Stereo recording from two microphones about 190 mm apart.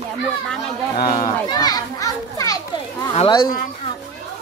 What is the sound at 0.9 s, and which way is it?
Speech, 50° left (ahead or behind).